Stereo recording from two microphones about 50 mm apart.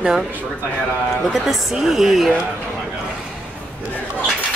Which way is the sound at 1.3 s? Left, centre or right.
Centre.